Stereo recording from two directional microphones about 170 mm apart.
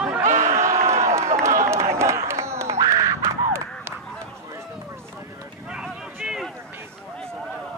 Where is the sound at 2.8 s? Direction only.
20° right (ahead or behind).